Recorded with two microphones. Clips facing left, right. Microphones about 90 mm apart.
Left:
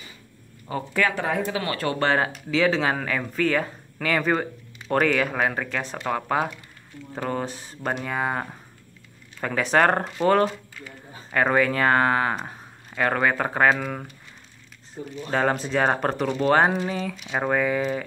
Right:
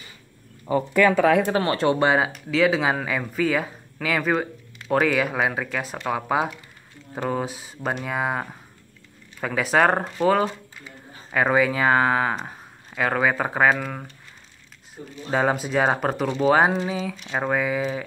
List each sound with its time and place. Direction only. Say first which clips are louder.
1.2 s speech: right 7 dB; 80° right
1.5 s speech: right 6 dB; 30° right (ahead or behind); by 14.1 s centre (ahead or behind)
15.3 s speech: right 1 dB; 5° right (ahead or behind)